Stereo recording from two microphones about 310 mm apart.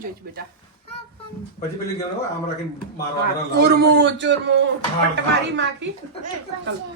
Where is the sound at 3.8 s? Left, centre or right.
Right.